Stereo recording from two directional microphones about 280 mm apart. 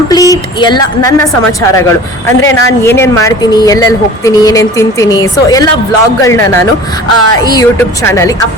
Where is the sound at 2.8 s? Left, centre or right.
Centre.